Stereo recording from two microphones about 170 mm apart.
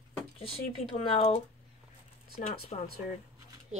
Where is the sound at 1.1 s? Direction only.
35° left (ahead or behind).